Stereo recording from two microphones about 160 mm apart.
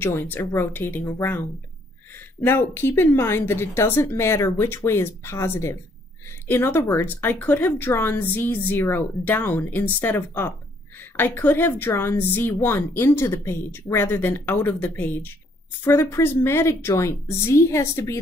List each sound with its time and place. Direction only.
0.0 s a woman's voice: 15° left (ahead or behind)
2.4 s a woman's voice: 15° left (ahead or behind)